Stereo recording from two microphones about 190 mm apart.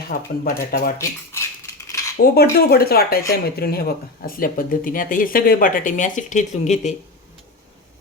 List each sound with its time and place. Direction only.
0.1 s speech: 50° left (ahead or behind)
0.9 s cutlery: 15° left (ahead or behind)
2.3 s speech: 55° left (ahead or behind); by 6.9 s 40° left (ahead or behind)